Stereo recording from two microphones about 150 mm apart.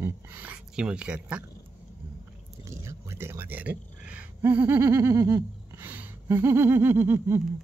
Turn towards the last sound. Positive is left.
turn(degrees=-15)  # may be behind; listen again after turning